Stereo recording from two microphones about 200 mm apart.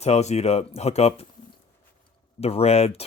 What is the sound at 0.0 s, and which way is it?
Speech, 35° left (ahead or behind).